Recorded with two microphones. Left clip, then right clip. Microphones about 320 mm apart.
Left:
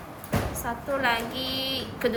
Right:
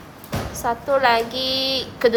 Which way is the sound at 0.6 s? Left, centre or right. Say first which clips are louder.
Right 11 dB; centre.